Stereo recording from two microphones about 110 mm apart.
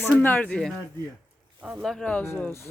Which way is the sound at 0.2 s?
15° left (ahead or behind).